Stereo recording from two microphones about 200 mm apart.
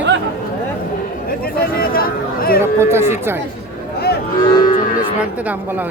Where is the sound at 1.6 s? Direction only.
45° left (ahead or behind).